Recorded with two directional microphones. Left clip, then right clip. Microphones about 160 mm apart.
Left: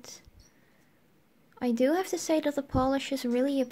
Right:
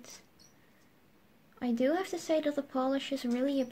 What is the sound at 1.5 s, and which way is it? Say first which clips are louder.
Speech: left 4 dB; 40° left (ahead or behind).